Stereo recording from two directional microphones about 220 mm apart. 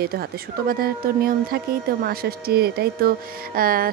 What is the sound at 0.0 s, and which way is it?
Speech, 45° right (ahead or behind).